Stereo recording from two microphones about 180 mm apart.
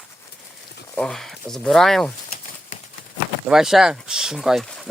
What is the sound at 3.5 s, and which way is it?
Speech, centre (ahead or behind).